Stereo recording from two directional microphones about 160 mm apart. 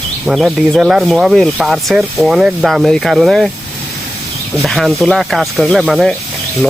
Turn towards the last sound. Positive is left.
turn(degrees=0)  # may be behind; listen again after turning